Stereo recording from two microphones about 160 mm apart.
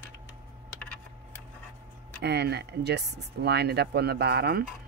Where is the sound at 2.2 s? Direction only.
90° right.